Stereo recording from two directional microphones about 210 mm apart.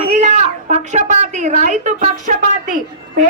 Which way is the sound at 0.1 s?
35° right (ahead or behind).